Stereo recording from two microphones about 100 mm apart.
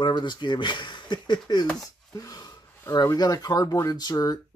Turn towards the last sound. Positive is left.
turn(degrees=40)  # may be behind; listen again after turning